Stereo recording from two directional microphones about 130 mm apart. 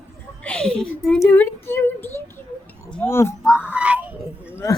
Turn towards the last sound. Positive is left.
turn(degrees=20)  # may be behind; listen again after turning